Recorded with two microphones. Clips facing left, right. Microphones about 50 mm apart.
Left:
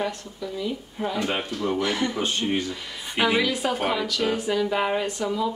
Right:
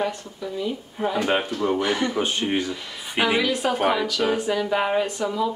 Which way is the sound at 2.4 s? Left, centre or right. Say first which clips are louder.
Right 2 dB; right.